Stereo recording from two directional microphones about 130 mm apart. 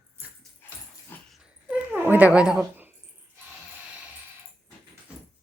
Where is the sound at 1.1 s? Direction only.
15° left (ahead or behind).